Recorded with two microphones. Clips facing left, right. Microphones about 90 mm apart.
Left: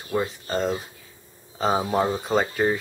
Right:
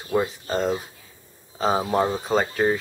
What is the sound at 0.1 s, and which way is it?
Speech, 5° right (ahead or behind).